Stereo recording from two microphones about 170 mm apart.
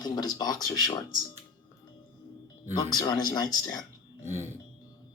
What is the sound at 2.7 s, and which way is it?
Speech, 25° left (ahead or behind).